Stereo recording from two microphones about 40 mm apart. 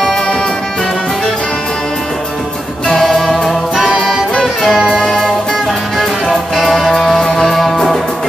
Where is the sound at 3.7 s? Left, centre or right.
Centre.